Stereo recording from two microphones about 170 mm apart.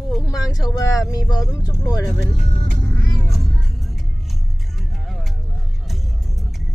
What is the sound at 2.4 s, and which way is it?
Speech, 50° right (ahead or behind).